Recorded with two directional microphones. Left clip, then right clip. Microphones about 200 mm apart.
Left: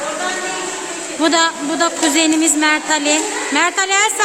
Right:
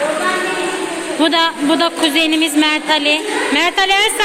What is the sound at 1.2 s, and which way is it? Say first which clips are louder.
Speech: right 1 dB; 15° left (ahead or behind).